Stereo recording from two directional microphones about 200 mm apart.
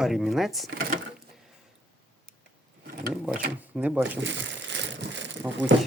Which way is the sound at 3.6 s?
5° right (ahead or behind).